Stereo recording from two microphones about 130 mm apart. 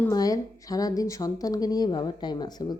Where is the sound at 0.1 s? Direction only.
30° left (ahead or behind).